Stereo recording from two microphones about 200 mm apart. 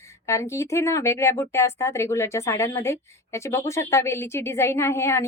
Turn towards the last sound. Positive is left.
turn(degrees=15)  # may be behind; listen again after turning